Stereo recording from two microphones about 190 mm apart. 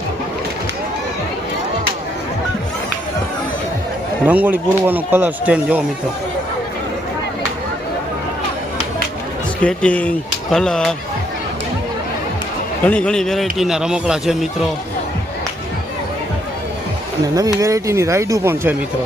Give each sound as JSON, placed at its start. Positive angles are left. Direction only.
{"t": 4.3, "sound": "speech", "side_deg": -10}
{"t": 9.6, "sound": "a man's voice", "side_deg": 5}
{"t": 12.8, "sound": "a man's voice", "side_deg": 5}
{"t": 17.3, "sound": "speech", "side_deg": -15}